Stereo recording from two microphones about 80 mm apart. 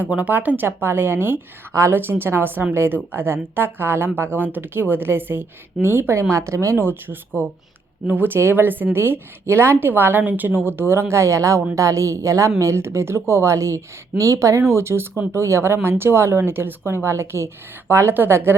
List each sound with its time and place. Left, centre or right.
0.0 s speech: centre